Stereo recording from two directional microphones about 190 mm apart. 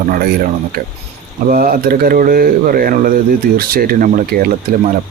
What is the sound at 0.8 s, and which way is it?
Speech, 50° right (ahead or behind).